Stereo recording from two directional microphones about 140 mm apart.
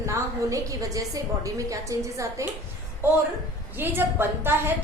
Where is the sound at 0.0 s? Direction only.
20° right (ahead or behind).